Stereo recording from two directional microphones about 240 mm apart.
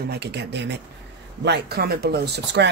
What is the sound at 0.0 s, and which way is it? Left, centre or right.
Speech, right.